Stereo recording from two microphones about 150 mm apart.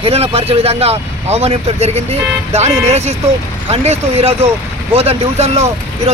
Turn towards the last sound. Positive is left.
turn(degrees=-45)  # may be behind; listen again after turning